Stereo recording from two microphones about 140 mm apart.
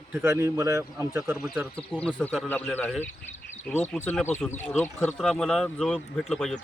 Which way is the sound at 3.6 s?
10° left (ahead or behind).